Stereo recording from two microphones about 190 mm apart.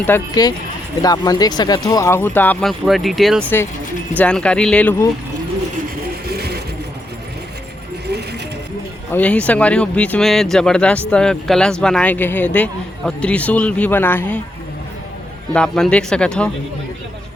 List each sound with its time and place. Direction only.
0.0 s speech: 15° left (ahead or behind)
6.2 s a sound: 60° right (ahead or behind)
9.1 s speech: 5° left (ahead or behind)
15.5 s speech: 5° left (ahead or behind)